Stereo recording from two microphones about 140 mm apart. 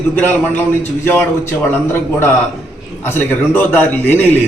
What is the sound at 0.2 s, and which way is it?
A man's voice, 15° left (ahead or behind).